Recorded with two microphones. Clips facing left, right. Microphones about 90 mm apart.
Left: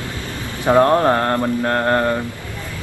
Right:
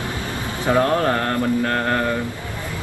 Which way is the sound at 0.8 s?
30° left (ahead or behind).